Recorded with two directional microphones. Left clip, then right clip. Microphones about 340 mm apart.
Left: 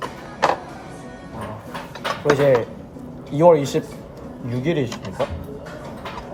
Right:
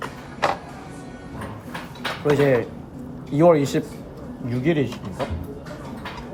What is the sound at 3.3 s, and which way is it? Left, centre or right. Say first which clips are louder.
Speech: left 2 dB; centre.